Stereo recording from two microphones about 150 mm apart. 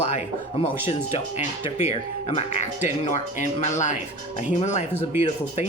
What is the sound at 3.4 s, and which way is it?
Speech, 50° left (ahead or behind).